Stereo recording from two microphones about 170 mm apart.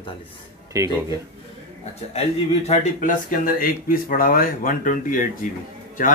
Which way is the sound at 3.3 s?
55° left (ahead or behind).